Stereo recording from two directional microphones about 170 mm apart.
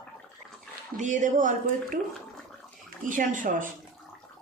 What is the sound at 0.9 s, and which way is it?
A woman's voice, 45° right (ahead or behind).